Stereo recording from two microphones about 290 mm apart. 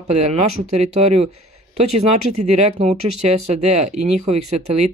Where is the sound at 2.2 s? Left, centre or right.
Right.